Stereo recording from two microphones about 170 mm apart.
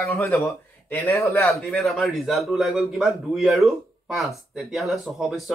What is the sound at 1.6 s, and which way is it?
A man's voice, centre (ahead or behind).